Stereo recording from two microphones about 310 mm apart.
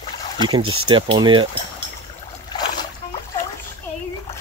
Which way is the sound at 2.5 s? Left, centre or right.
Centre.